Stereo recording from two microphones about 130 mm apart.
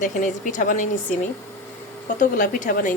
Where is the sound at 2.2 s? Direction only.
80° left.